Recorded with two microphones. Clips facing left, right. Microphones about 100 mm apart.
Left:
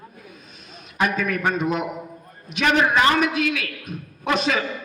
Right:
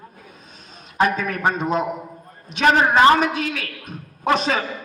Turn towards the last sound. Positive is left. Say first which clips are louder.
# right 2 dB
turn(degrees=-35)  # may be behind; listen again after turning